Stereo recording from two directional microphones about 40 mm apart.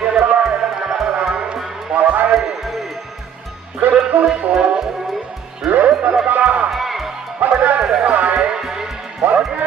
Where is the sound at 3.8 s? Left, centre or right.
Right.